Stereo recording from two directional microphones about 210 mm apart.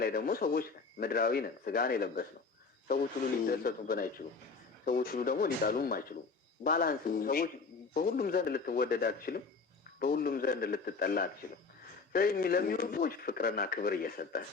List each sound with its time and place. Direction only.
0.0 s speech: 45° left (ahead or behind)
3.4 s speech: 45° left (ahead or behind)